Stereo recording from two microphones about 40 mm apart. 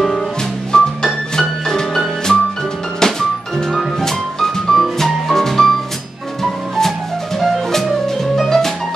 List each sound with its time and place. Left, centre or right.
0.7 s music: centre
7.7 s music: centre